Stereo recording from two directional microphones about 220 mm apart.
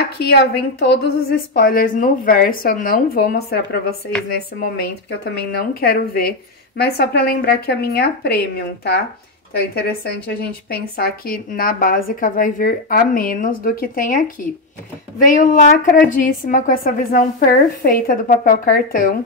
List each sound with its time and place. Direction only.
0.2 s speech: 50° left (ahead or behind)
5.8 s a woman's voice: 45° left (ahead or behind)